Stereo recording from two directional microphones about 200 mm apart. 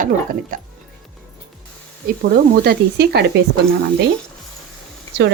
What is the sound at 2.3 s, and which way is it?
Speech, 50° right (ahead or behind).